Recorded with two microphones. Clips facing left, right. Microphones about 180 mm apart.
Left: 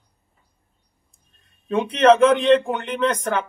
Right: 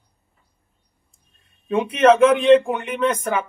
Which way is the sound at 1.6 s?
10° right (ahead or behind).